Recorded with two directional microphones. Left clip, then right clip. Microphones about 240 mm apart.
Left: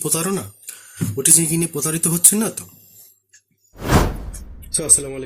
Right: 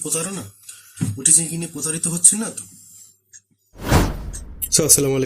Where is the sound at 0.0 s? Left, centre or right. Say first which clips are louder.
Left 4 dB; left.